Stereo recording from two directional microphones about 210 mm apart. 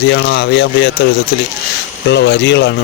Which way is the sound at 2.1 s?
55° left (ahead or behind).